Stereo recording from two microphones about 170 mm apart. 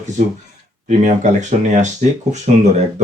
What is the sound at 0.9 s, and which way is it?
Speech, 45° right (ahead or behind).